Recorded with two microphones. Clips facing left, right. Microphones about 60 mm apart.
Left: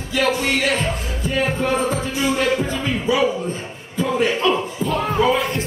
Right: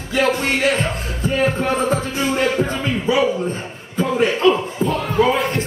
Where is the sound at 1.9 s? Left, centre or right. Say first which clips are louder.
Right 1 dB; right.